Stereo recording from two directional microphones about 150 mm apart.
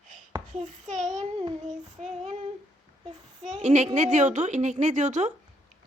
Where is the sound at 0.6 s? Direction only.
55° right (ahead or behind).